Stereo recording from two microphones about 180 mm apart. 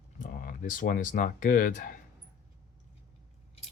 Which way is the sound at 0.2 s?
50° left (ahead or behind).